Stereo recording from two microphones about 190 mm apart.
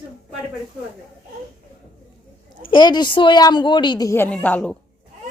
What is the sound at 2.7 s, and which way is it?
Speech, 25° left (ahead or behind).